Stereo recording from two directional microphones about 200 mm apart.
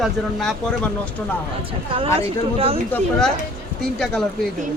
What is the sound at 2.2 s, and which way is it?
Speech, 30° right (ahead or behind).